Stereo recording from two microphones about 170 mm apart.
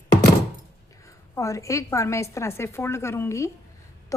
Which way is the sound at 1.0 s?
20° left (ahead or behind).